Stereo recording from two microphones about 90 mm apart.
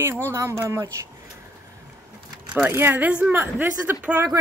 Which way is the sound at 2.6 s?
25° right (ahead or behind).